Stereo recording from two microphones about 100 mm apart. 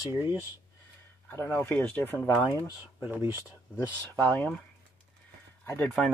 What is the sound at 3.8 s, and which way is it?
Speech, 15° left (ahead or behind).